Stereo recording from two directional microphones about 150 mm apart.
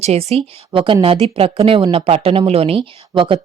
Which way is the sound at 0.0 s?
45° right (ahead or behind).